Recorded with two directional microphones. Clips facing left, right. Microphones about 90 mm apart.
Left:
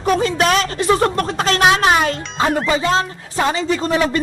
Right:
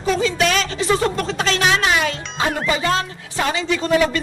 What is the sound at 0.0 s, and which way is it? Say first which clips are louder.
Speech: left 2 dB; 50° left (ahead or behind).